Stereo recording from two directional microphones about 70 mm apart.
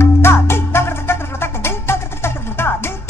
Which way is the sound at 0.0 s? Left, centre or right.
Left.